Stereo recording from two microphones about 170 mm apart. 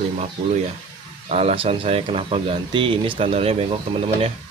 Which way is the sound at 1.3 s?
35° right (ahead or behind).